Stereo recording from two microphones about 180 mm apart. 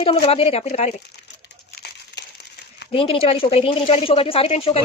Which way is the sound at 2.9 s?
30° left (ahead or behind).